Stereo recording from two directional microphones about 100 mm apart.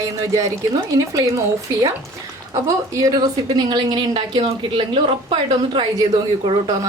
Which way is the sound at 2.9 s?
35° right (ahead or behind).